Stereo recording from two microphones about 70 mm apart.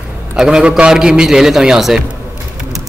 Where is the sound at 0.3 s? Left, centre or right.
Centre.